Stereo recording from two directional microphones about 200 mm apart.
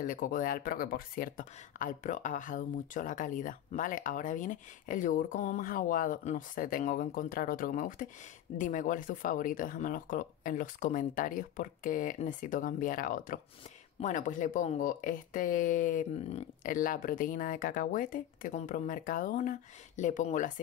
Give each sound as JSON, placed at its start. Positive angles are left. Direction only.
{"t": 0.0, "sound": "speech", "side_deg": 40}